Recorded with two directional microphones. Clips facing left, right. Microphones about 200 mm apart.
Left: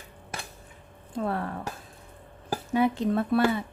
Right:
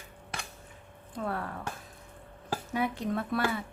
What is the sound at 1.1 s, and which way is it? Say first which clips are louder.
Speech: left 5 dB; 30° left (ahead or behind).